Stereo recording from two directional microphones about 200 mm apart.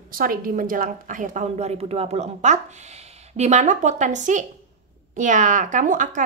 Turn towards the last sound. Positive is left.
turn(degrees=-40)  # may be behind; listen again after turning